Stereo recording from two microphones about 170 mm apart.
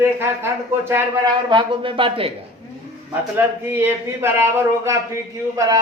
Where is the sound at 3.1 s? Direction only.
10° right (ahead or behind).